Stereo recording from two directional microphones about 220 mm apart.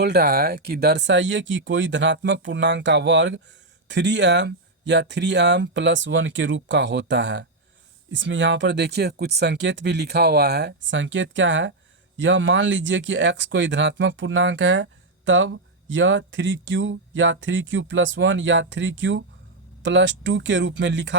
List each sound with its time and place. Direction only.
0.0 s speech: 45° right (ahead or behind)